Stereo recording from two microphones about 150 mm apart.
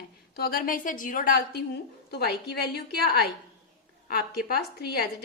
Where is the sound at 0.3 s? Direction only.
85° left.